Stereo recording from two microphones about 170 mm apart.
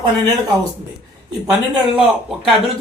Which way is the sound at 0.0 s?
20° right (ahead or behind).